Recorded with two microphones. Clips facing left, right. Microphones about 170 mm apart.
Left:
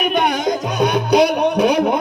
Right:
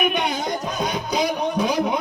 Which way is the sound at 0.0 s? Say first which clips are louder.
Left 4 dB; 45° left (ahead or behind).